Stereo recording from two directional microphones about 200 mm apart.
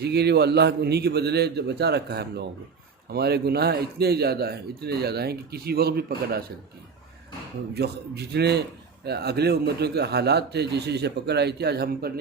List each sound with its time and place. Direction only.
0.0 s a man's voice: 55° right (ahead or behind)
7.7 s a man's voice: 55° right (ahead or behind)